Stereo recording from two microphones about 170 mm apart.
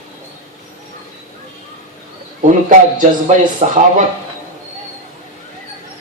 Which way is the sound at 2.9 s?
45° right (ahead or behind).